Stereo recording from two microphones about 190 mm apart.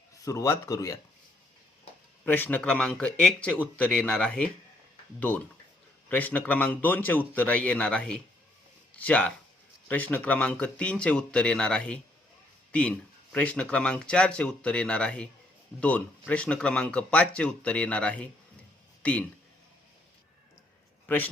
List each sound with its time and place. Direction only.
0.3 s speech: 15° left (ahead or behind)
2.2 s speech: 10° left (ahead or behind)
6.1 s speech: 10° left (ahead or behind)